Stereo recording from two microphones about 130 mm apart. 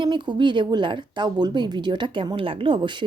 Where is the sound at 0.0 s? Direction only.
35° right (ahead or behind).